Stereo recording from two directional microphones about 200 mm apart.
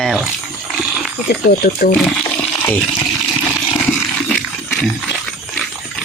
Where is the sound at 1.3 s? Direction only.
55° left (ahead or behind).